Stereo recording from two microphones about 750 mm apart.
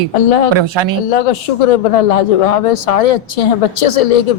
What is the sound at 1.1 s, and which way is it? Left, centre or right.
Speech, left.